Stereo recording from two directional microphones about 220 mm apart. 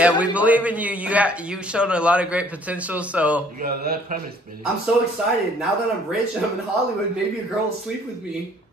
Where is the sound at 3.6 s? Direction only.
45° right (ahead or behind).